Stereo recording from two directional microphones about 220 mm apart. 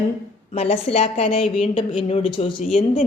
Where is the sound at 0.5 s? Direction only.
30° left (ahead or behind).